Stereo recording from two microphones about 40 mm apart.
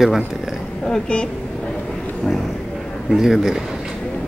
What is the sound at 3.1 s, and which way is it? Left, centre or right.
Speech, centre.